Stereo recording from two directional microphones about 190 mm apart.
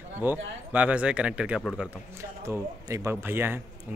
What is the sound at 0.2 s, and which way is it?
Speech, 10° right (ahead or behind).